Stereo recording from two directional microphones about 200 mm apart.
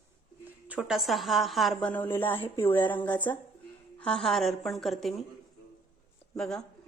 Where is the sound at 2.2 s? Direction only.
25° left (ahead or behind).